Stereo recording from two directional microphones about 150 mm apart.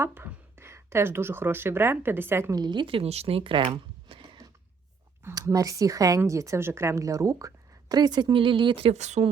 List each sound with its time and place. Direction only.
0.0 s speech: 15° right (ahead or behind); by 4.2 s 35° right (ahead or behind)
5.2 s speech: 20° right (ahead or behind); by 9.3 s 50° right (ahead or behind)